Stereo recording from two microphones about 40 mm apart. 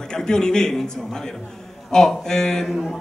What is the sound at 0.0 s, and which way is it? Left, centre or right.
A man's voice, centre.